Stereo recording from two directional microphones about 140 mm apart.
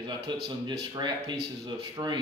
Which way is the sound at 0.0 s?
30° right (ahead or behind).